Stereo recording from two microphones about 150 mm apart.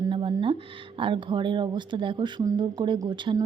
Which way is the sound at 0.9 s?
35° right (ahead or behind).